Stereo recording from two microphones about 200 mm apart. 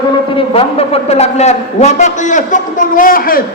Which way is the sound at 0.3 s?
30° left (ahead or behind).